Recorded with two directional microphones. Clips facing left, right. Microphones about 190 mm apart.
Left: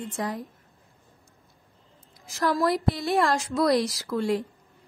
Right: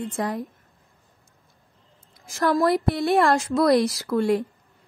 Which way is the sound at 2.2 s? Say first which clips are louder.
Right 3 dB; 50° right (ahead or behind).